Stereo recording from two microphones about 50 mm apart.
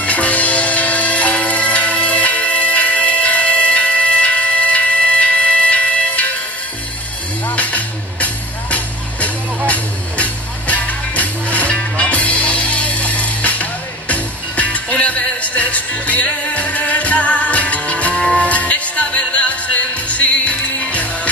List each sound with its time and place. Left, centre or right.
0.0 s music: left
7.4 s music: left